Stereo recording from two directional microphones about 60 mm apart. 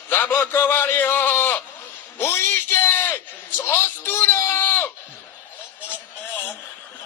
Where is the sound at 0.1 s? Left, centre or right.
Left.